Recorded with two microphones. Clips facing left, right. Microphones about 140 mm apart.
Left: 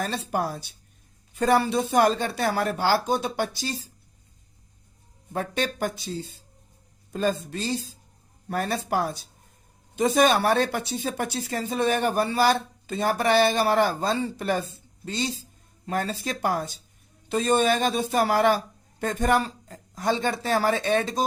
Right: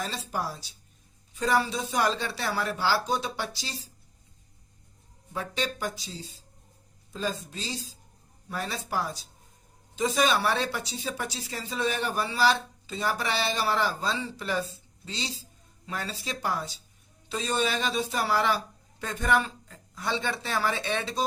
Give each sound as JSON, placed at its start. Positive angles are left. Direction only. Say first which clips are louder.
{"t": 0.0, "sound": "speech", "louder": "left 5 dB", "side_deg": 55}
{"t": 5.3, "sound": "speech", "louder": "left 4 dB", "side_deg": 55}